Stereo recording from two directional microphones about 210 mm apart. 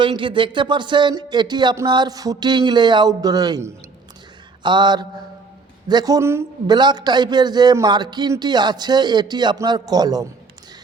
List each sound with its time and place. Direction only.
0.0 s a man's voice: 25° right (ahead or behind)